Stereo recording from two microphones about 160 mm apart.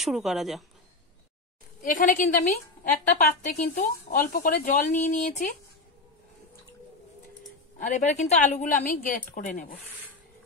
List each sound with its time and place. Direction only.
0.0 s a woman's voice: centre (ahead or behind)
1.8 s a woman's voice: 55° left (ahead or behind)
7.8 s a woman's voice: 50° left (ahead or behind)